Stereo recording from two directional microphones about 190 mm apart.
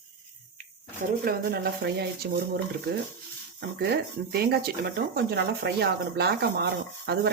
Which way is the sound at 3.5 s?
55° right (ahead or behind).